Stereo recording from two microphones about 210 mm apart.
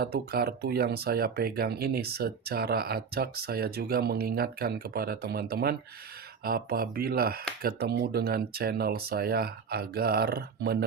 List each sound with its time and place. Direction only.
0.0 s speech: 45° right (ahead or behind)